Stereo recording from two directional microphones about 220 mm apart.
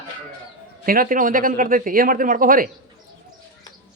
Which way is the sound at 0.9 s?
40° right (ahead or behind).